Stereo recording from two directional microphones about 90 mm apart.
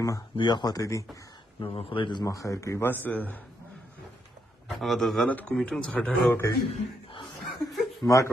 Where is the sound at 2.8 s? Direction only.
25° left (ahead or behind).